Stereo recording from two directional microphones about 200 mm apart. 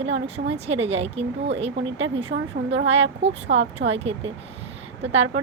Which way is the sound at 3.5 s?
55° right (ahead or behind).